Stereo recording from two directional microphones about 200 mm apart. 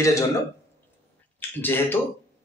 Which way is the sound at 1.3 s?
10° left (ahead or behind).